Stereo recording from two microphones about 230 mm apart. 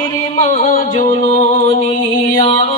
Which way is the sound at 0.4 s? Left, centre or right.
Left.